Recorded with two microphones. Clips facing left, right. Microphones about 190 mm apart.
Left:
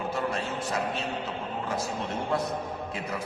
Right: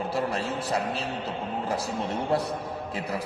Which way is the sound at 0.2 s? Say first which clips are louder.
Right 3 dB; 35° right (ahead or behind).